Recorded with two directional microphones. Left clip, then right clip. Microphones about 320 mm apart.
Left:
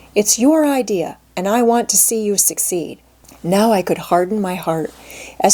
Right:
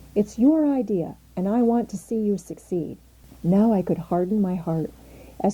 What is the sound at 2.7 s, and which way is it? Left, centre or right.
Speech, left.